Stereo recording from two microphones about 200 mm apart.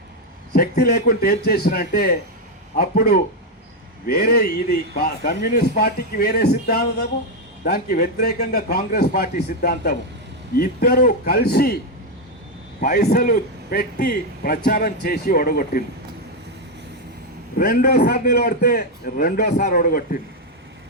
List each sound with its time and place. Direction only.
0.5 s a man's voice: 50° left (ahead or behind)
12.8 s a man's voice: 50° left (ahead or behind)
17.6 s a man's voice: 45° left (ahead or behind)